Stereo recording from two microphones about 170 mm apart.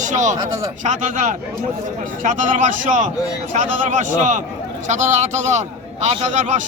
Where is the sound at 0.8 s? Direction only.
45° right (ahead or behind).